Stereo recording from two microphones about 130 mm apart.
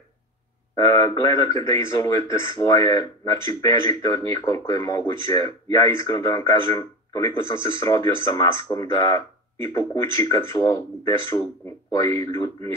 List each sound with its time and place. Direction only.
0.7 s a man's voice: 30° left (ahead or behind)